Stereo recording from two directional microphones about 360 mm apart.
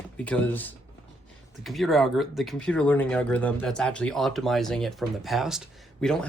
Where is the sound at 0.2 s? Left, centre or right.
Centre.